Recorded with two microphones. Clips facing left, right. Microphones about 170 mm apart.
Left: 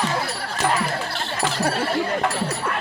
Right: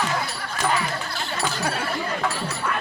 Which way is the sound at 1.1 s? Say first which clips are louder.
Left 2 dB; 30° left (ahead or behind).